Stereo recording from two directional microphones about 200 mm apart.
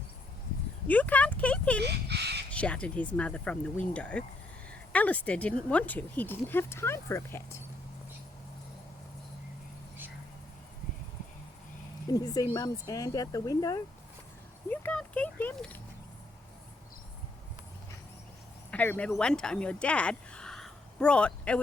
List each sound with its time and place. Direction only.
0.9 s speech: 5° left (ahead or behind)
1.8 s a sound: 55° right (ahead or behind)
2.5 s speech: 5° left (ahead or behind)
12.0 s speech: 20° left (ahead or behind)
14.7 s speech: 5° left (ahead or behind)
18.7 s speech: 10° left (ahead or behind)